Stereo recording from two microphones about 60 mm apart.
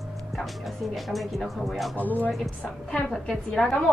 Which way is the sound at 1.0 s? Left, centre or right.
Centre.